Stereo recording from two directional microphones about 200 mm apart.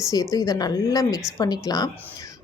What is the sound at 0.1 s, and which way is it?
A woman's voice, 20° left (ahead or behind).